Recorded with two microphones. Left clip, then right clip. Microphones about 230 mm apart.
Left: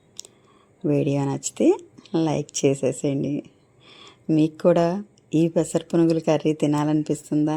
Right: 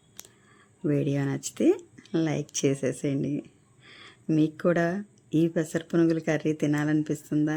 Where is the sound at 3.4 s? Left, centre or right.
Right.